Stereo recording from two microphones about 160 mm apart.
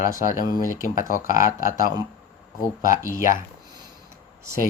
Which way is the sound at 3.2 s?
55° left (ahead or behind).